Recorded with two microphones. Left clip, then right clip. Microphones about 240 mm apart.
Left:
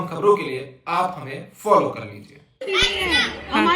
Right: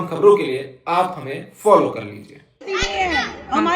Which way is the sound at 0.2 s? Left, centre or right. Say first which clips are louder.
Right 5 dB; centre.